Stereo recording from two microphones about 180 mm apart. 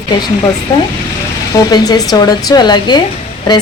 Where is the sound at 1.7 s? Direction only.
20° left (ahead or behind).